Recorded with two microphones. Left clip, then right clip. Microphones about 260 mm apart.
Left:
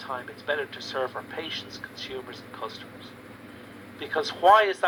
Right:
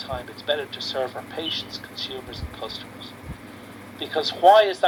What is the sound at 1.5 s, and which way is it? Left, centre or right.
Speech, right.